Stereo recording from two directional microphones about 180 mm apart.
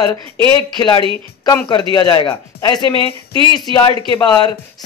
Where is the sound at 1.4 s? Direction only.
20° left (ahead or behind).